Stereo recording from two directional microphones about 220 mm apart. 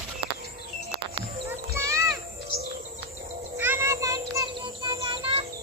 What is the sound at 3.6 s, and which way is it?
Bird, 10° right (ahead or behind).